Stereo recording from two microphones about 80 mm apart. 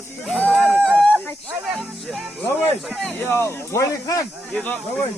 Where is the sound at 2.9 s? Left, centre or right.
Centre.